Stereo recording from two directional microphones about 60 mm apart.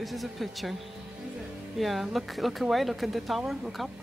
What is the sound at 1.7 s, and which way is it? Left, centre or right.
Speech, centre.